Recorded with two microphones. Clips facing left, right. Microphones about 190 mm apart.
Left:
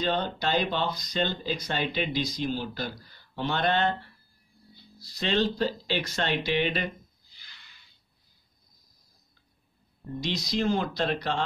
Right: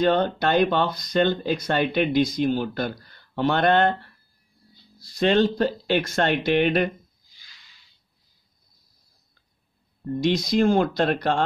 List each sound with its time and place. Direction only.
0.0 s speech: 60° right (ahead or behind)
5.0 s speech: 50° right (ahead or behind)
10.2 s speech: 50° right (ahead or behind)